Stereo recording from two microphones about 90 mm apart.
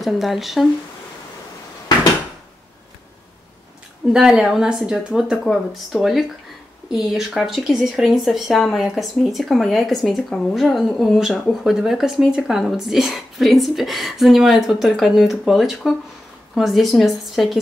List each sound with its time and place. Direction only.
0.0 s speech: centre (ahead or behind)
4.1 s speech: 10° right (ahead or behind)